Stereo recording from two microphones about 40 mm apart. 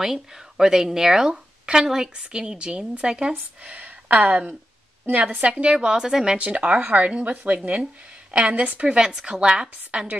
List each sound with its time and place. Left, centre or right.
0.0 s speech: centre
2.1 s a woman's voice: right
5.1 s a woman's voice: right
5.4 s a woman's voice: right
6.3 s a woman's voice: right
9.8 s a woman's voice: right